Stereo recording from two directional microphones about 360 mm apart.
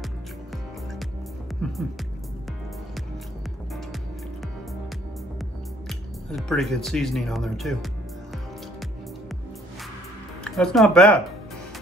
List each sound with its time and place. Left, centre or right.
5.9 s speech: centre
10.4 s speech: centre